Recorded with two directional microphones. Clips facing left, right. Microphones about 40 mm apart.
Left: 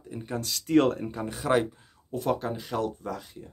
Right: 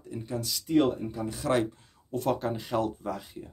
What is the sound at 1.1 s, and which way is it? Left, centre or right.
Speech, left.